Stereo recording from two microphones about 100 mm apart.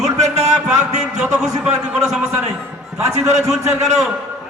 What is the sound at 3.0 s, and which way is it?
Speech, 30° right (ahead or behind).